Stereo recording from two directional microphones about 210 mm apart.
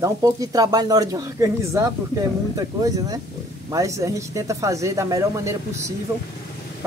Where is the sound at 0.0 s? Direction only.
15° right (ahead or behind).